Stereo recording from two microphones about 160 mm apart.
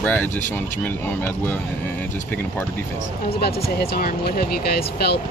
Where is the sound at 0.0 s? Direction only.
10° left (ahead or behind).